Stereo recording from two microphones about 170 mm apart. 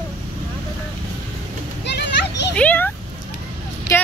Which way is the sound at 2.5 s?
10° left (ahead or behind).